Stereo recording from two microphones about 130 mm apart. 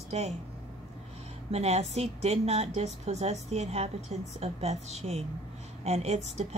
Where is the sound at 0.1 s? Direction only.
55° right (ahead or behind).